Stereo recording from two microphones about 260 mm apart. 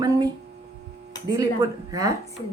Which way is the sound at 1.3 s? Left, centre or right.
Centre.